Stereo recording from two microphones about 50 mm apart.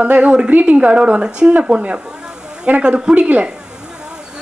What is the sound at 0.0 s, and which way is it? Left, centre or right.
A woman's voice, right.